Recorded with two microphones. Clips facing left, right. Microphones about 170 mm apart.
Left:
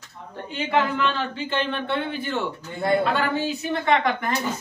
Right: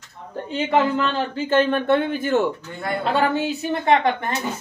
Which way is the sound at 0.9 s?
45° right (ahead or behind).